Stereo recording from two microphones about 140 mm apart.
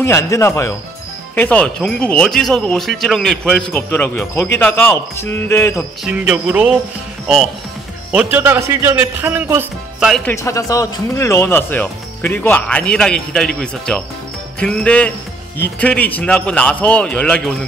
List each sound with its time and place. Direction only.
0.0 s speech: 20° left (ahead or behind)
6.0 s speech: 10° right (ahead or behind)
8.1 s speech: 10° right (ahead or behind)
9.9 s speech: 5° right (ahead or behind)
10.2 s speech: 20° left (ahead or behind)